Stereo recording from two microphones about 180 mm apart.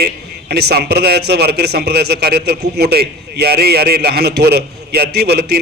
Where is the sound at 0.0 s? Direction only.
60° right (ahead or behind).